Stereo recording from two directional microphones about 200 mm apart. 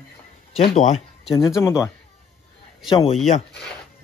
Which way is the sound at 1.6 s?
10° left (ahead or behind).